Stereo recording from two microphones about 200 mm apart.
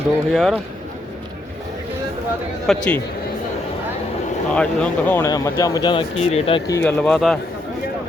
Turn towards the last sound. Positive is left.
turn(degrees=0)  # may be behind; listen again after turning